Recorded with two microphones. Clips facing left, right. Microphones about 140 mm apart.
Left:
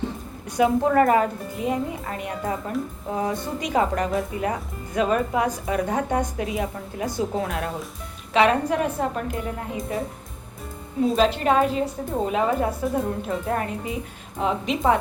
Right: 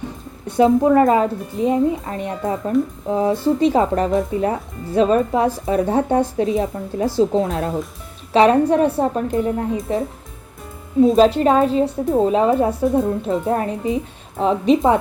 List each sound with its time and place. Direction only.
0.4 s speech: 25° right (ahead or behind)
1.5 s speech: 30° right (ahead or behind)
11.2 s speech: 35° right (ahead or behind)